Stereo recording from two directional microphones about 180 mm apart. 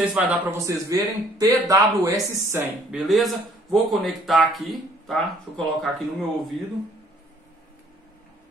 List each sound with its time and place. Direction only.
0.0 s a man's voice: 5° right (ahead or behind)
2.9 s a man's voice: centre (ahead or behind)